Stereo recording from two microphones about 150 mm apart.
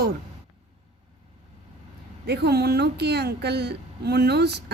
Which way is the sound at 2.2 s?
90° right.